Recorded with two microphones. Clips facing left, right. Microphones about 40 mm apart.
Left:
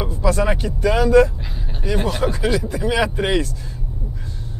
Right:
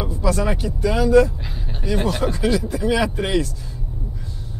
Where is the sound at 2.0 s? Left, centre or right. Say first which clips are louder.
Even; centre.